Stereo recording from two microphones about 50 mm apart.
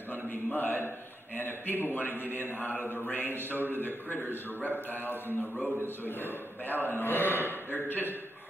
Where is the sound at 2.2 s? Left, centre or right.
Right.